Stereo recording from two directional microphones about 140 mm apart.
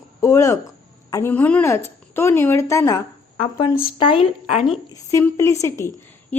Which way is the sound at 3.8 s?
40° left (ahead or behind).